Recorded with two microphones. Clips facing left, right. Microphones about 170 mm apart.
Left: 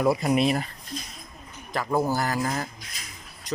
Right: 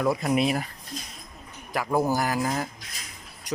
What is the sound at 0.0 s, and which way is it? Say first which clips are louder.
Speech: left 2 dB; 10° left (ahead or behind).